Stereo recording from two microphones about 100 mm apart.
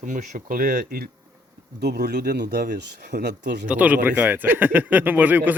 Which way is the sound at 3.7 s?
15° right (ahead or behind).